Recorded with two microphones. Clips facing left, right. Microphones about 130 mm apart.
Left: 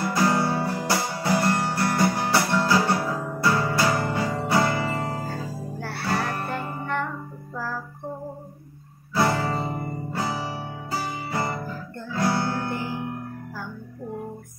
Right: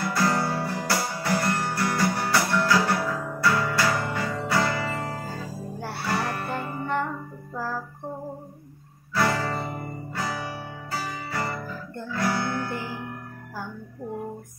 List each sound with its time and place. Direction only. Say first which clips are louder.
0.1 s guitar: left 3 dB; 20° left (ahead or behind)
4.0 s music: left 3 dB; 25° left (ahead or behind)
5.8 s music: right 2 dB; 15° right (ahead or behind)
9.1 s music: left 2 dB; 25° left (ahead or behind)